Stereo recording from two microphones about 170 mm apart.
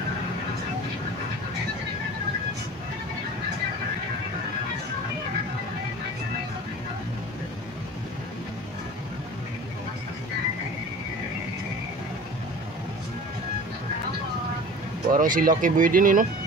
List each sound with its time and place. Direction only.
15.0 s speech: 55° right (ahead or behind)